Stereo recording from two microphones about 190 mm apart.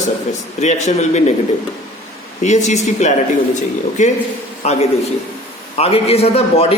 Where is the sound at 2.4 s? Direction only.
35° left (ahead or behind).